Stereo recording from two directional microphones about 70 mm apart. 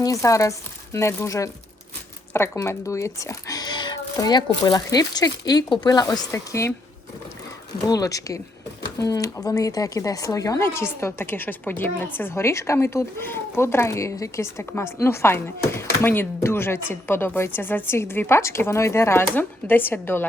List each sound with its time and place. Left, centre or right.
0.0 s speech: left
2.6 s speech: left
6.3 s speech: left
7.9 s a woman's voice: left
10.6 s speech: left
19.4 s speech: left